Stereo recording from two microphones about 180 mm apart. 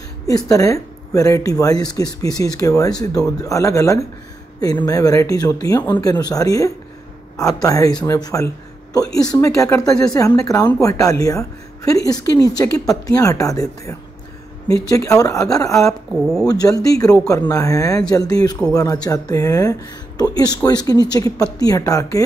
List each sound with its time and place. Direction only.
0.5 s speech: 20° left (ahead or behind)